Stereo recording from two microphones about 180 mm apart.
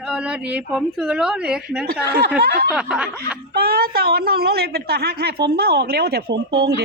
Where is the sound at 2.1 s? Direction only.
65° right (ahead or behind).